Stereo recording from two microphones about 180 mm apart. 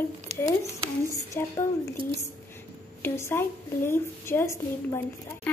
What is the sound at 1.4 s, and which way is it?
Speech, 15° left (ahead or behind).